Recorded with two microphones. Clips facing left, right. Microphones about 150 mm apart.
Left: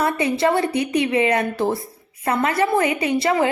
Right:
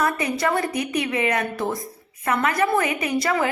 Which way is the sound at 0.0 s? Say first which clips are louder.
Left 4 dB; 25° left (ahead or behind).